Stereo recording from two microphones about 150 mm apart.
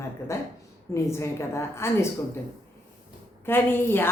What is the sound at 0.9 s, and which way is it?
A woman's voice, 20° left (ahead or behind).